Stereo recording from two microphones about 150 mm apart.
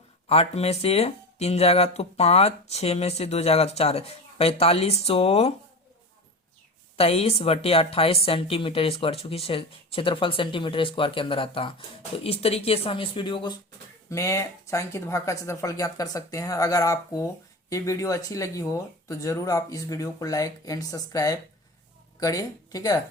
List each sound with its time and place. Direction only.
0.3 s speech: 45° left (ahead or behind)
6.9 s a woman's voice: 40° left (ahead or behind)
14.1 s speech: 20° left (ahead or behind)